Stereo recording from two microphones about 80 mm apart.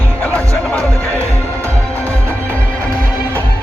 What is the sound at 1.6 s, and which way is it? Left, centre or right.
Music, right.